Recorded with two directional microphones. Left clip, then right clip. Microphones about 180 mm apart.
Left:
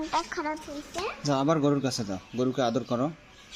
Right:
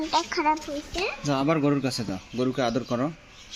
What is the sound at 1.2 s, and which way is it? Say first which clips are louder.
A man's voice: even; 10° left (ahead or behind).